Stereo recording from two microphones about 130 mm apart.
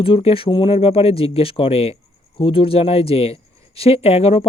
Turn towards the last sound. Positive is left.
turn(degrees=50)  # may be behind; listen again after turning